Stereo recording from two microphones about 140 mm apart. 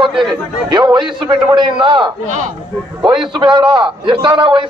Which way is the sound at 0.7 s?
35° right (ahead or behind).